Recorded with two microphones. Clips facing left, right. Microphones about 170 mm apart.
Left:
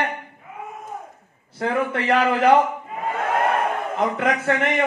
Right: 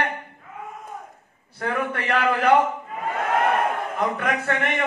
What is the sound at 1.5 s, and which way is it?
Speech, 20° left (ahead or behind).